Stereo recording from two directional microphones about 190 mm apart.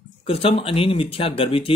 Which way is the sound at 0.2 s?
30° left (ahead or behind).